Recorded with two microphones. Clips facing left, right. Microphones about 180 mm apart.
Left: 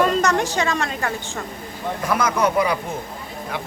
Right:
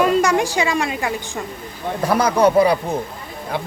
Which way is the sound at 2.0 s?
35° right (ahead or behind).